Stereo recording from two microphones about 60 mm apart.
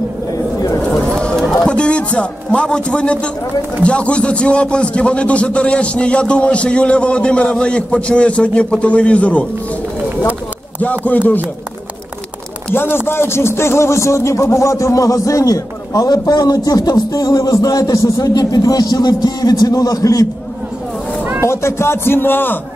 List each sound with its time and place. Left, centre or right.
0.8 s chatter: centre
1.7 s a man's voice: centre
10.8 s a man's voice: left
12.7 s a man's voice: left
21.5 s speech: left